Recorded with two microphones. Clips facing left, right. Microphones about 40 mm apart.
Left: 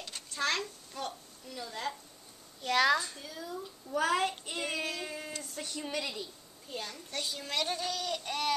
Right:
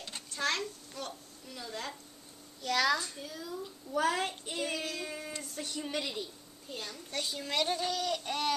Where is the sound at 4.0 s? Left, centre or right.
Left.